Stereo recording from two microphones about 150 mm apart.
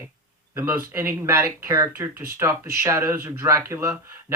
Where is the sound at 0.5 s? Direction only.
15° right (ahead or behind).